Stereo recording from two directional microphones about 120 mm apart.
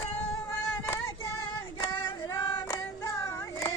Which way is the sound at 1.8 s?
35° left (ahead or behind).